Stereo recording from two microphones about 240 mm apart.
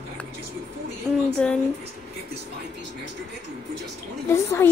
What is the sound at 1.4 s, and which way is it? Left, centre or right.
Speech, centre.